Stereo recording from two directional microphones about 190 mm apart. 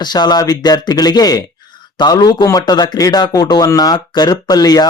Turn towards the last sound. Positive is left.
turn(degrees=20)  # may be behind; listen again after turning